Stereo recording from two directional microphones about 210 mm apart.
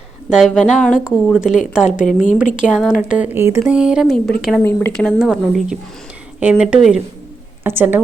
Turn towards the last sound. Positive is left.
turn(degrees=-10)  # may be behind; listen again after turning